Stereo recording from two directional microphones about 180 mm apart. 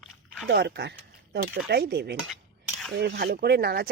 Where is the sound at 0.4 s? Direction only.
70° right (ahead or behind).